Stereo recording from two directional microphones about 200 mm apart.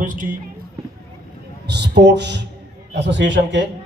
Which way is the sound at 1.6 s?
55° right (ahead or behind).